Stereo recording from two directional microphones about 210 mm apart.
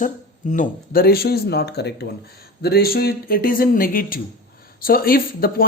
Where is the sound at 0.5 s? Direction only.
40° left (ahead or behind).